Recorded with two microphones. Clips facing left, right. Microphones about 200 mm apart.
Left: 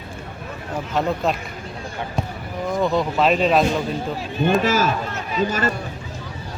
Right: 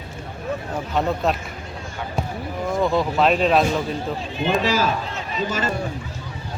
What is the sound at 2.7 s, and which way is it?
Speech, centre (ahead or behind).